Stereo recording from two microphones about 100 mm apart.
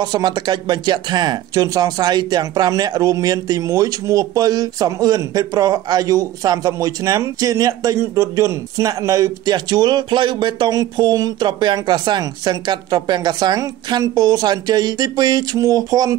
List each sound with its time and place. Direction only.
0.0 s speech: 45° right (ahead or behind)